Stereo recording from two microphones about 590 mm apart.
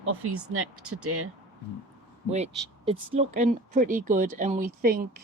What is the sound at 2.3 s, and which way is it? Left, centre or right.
Speech, centre.